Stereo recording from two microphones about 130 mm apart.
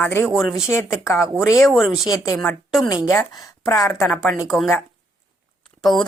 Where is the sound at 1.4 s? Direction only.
20° left (ahead or behind).